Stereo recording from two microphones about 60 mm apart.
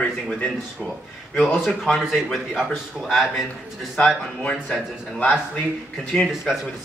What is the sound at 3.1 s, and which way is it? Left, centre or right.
Speech, centre.